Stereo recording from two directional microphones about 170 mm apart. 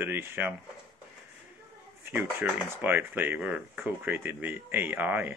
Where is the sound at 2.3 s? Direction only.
10° right (ahead or behind).